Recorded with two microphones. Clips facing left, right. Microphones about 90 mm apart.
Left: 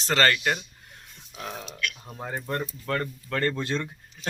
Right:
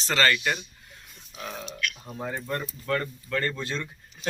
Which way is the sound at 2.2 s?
25° left (ahead or behind).